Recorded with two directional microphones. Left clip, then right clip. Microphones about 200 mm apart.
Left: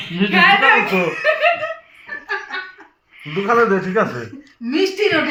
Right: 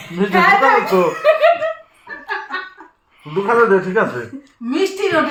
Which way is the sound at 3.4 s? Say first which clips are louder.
Right 2 dB; 20° right (ahead or behind).